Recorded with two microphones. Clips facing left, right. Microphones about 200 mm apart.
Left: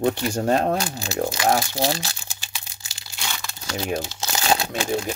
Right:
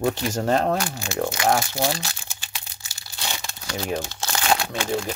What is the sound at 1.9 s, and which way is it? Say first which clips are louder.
Speech: left 1 dB; 35° left (ahead or behind).